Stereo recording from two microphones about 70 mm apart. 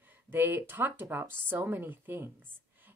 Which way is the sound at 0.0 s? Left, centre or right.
Right.